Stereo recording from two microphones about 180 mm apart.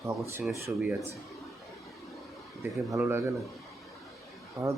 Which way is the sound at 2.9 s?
15° right (ahead or behind).